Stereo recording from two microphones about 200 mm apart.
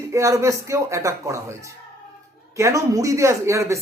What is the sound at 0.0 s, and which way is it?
Speech, 15° right (ahead or behind).